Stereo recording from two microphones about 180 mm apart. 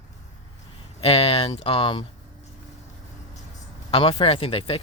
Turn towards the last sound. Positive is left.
turn(degrees=30)  # may be behind; listen again after turning